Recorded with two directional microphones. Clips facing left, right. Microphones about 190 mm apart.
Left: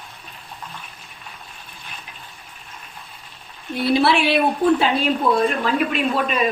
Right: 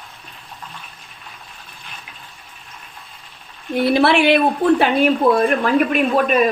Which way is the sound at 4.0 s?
60° right (ahead or behind).